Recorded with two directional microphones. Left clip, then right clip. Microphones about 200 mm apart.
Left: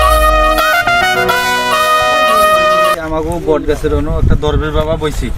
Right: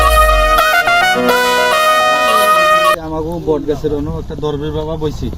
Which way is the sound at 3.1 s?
25° left (ahead or behind).